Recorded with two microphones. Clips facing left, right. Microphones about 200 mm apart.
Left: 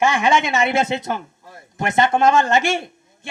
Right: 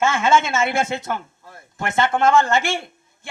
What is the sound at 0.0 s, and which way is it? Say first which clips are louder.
Speech: left 1 dB; 15° left (ahead or behind).